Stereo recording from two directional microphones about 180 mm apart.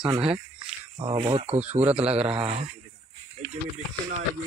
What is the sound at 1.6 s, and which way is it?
Speech, 10° right (ahead or behind).